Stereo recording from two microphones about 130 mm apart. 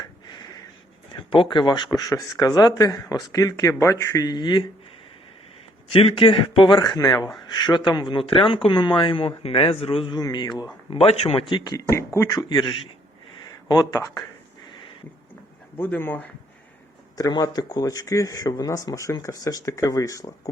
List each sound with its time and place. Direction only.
0.0 s a sound: 35° left (ahead or behind)
1.3 s speech: 40° left (ahead or behind)
5.9 s speech: 45° left (ahead or behind)
10.2 s speech: 30° left (ahead or behind)
12.4 s speech: 35° left (ahead or behind)
14.7 s a sound: 40° left (ahead or behind)
15.8 s speech: 15° left (ahead or behind)
17.2 s speech: 30° left (ahead or behind)